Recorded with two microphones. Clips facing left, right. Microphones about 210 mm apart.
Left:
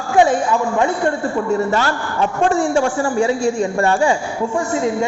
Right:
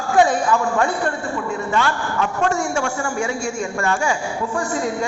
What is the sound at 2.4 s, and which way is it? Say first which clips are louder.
A man's voice: left 7 dB; 35° left (ahead or behind).